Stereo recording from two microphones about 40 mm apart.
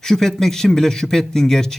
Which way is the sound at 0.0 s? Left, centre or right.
Centre.